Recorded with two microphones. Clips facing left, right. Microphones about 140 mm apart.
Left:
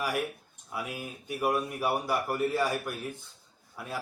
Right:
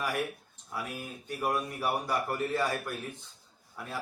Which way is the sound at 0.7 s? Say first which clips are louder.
Left 1 dB; 10° left (ahead or behind).